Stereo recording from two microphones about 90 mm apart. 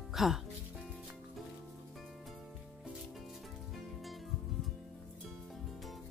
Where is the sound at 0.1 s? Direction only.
5° right (ahead or behind).